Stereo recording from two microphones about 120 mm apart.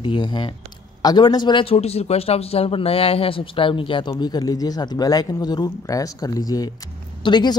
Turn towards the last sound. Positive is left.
turn(degrees=40)  # may be behind; listen again after turning